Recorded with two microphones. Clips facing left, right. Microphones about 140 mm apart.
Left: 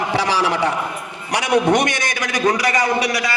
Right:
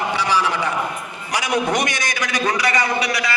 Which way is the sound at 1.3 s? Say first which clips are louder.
Left 4 dB; 65° left (ahead or behind).